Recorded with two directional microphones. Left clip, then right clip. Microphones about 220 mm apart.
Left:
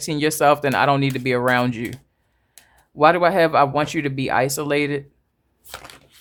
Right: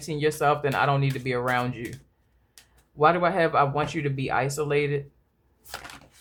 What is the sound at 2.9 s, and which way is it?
Speech, 45° left (ahead or behind).